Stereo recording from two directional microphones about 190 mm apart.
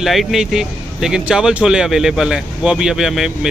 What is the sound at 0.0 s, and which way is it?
Speech, centre (ahead or behind).